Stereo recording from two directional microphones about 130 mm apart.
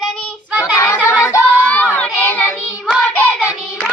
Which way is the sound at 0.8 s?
15° left (ahead or behind).